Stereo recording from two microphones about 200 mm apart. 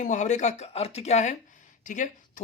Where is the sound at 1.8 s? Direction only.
40° left (ahead or behind).